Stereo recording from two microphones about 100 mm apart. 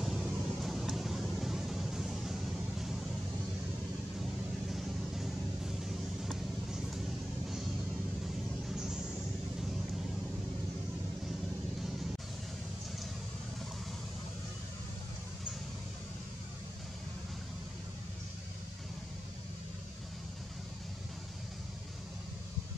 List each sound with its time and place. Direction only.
0.0 s vehicle: centre (ahead or behind)
4.2 s vehicle: centre (ahead or behind)